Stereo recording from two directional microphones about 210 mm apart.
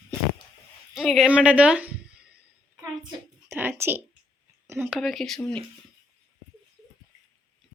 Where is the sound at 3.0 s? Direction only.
20° right (ahead or behind).